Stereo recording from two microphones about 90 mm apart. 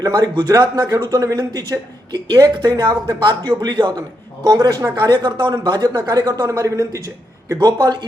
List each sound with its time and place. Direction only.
0.0 s speech: 45° right (ahead or behind)